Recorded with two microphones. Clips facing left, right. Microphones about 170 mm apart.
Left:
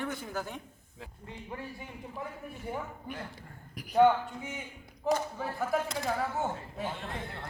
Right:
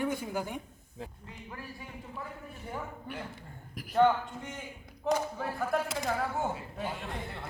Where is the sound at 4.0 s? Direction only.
5° left (ahead or behind).